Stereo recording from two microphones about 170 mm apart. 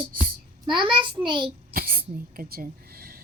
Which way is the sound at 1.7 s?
60° right (ahead or behind).